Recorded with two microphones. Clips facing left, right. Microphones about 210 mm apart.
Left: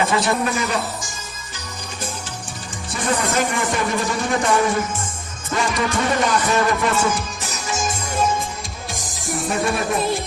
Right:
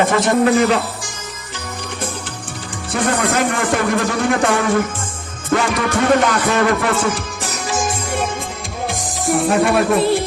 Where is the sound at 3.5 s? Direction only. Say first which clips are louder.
Right 4 dB; 55° right (ahead or behind).